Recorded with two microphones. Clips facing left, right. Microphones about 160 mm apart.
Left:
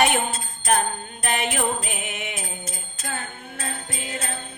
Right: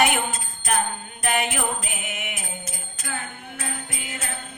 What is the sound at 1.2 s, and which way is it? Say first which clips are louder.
Jingle bell: right 2 dB; 30° left (ahead or behind).